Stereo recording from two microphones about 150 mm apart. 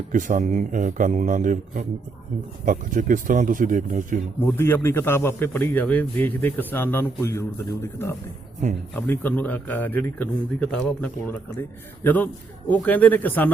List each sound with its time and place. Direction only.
0.1 s speech: 60° right (ahead or behind)
4.4 s a man's voice: 15° left (ahead or behind)